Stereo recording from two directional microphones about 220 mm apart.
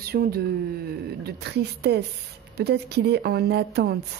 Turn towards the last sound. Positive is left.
turn(degrees=-50)  # may be behind; listen again after turning